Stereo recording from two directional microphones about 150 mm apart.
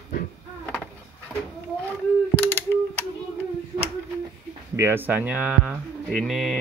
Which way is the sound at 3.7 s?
40° right (ahead or behind).